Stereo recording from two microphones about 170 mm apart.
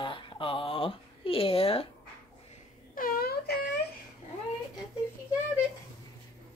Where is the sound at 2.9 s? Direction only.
60° left (ahead or behind).